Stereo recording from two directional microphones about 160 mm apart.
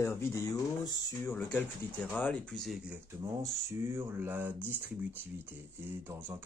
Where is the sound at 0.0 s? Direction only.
15° left (ahead or behind); by 3.0 s centre (ahead or behind).